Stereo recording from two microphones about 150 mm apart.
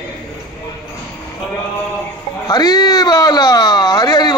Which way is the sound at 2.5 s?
25° left (ahead or behind).